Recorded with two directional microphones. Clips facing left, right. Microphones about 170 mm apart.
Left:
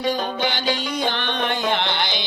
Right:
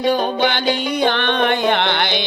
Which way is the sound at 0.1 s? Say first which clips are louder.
Right 6 dB; 60° right (ahead or behind).